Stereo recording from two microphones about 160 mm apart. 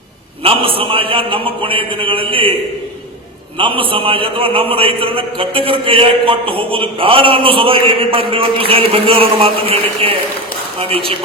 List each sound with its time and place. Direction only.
0.4 s a man's voice: 35° right (ahead or behind)
3.6 s a man's voice: 35° right (ahead or behind)